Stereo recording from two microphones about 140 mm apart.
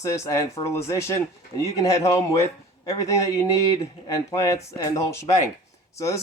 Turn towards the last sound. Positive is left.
turn(degrees=20)  # may be behind; listen again after turning